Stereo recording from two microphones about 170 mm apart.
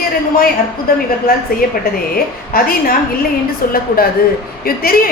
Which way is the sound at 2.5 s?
60° left (ahead or behind).